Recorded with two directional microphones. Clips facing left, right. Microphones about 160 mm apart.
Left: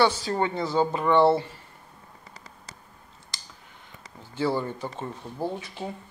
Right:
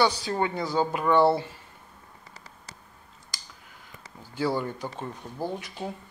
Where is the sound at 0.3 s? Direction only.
Centre (ahead or behind).